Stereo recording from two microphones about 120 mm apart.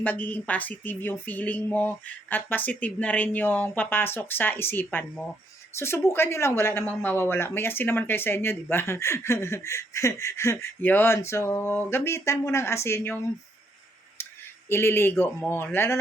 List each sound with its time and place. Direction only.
0.0 s a sound: 15° left (ahead or behind)
5.7 s speech: 20° left (ahead or behind)
14.7 s speech: 20° left (ahead or behind)